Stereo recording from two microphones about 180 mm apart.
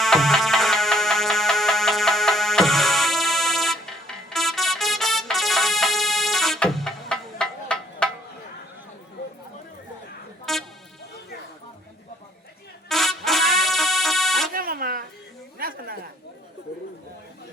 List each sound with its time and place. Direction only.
0.0 s music: centre (ahead or behind)
10.5 s music: centre (ahead or behind)
12.9 s music: centre (ahead or behind)
14.5 s buzzer: 55° right (ahead or behind)
15.5 s a sound: 55° right (ahead or behind)